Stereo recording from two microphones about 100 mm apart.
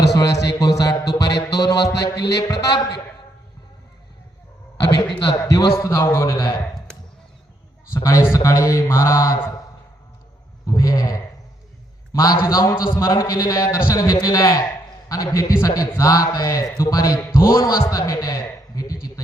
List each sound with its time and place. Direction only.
0.2 s music: 35° left (ahead or behind)
5.4 s music: 30° left (ahead or behind)
7.9 s music: 30° left (ahead or behind)
10.7 s music: 35° left (ahead or behind)
18.8 s a sound: 35° left (ahead or behind)